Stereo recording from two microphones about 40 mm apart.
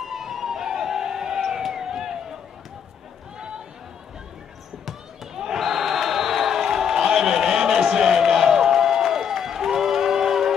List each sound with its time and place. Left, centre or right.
0.0 s emergency vehicle: centre
4.8 s basketball bounce: centre
7.8 s a sound: centre